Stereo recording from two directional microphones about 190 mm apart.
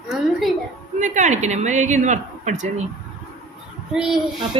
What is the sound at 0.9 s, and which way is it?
Speech, 40° right (ahead or behind).